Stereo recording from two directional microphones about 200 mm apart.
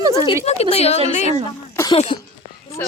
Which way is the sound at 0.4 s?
30° left (ahead or behind).